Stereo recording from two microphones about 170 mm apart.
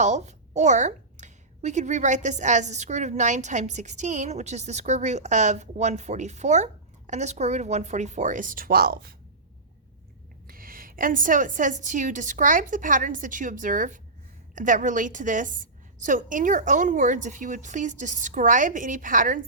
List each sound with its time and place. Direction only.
0.0 s a woman's voice: 40° right (ahead or behind); by 9.1 s 65° right (ahead or behind)
10.4 s a woman's voice: 55° right (ahead or behind)